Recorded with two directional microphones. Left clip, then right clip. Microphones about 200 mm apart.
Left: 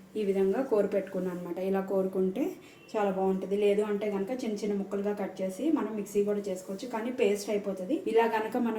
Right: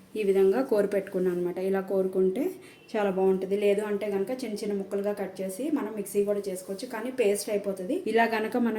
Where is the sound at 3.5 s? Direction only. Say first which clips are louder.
Right 1 dB; 50° right (ahead or behind).